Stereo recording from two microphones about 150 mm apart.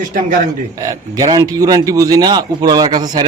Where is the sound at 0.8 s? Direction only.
25° right (ahead or behind).